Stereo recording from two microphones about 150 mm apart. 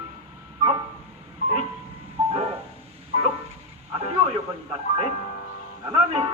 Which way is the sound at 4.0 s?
45° right (ahead or behind).